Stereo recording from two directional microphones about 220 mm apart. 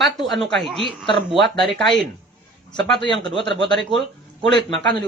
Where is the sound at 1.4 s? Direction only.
50° right (ahead or behind).